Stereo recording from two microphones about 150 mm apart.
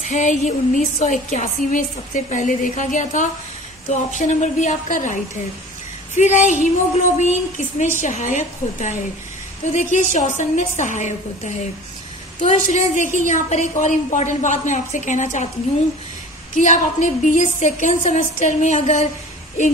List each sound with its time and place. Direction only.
0.0 s a woman's voice: 55° left (ahead or behind)
16.5 s a woman's voice: 55° left (ahead or behind)